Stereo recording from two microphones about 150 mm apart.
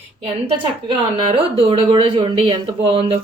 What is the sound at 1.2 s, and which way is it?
Speech, 35° right (ahead or behind).